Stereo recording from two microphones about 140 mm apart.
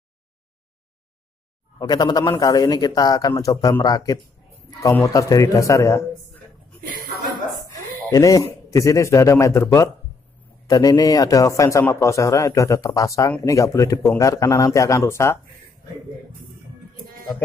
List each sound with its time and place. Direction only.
1.8 s a man's voice: 30° left (ahead or behind)
7.6 s a man's voice: 25° left (ahead or behind)